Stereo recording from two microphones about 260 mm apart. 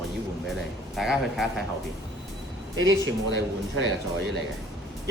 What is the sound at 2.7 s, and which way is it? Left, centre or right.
Speech, right.